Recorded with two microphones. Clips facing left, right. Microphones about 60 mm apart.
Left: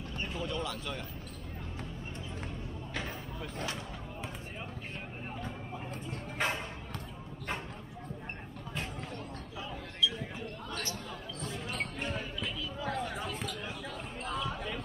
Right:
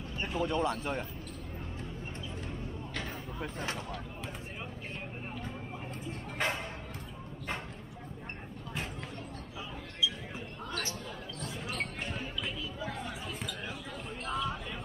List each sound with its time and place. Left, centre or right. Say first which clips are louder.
0.4 s speech: right 7 dB; right
3.3 s speech: right 2 dB; right
6.3 s speech: even; centre
14.2 s a sound: right 2 dB; centre